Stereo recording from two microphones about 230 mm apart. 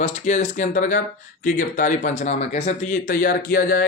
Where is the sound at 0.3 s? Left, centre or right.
Left.